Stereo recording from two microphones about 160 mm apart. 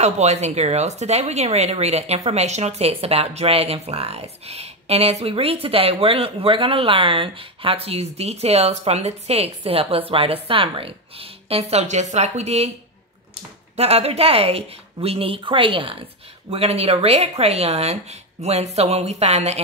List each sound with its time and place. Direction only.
0.0 s speech: 45° right (ahead or behind)
13.7 s speech: 40° right (ahead or behind)